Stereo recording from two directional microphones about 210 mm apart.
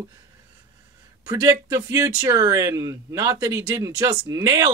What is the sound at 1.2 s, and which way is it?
Speech, 15° right (ahead or behind).